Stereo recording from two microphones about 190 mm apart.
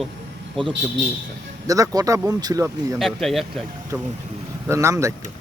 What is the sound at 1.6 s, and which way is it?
Speech, 20° right (ahead or behind).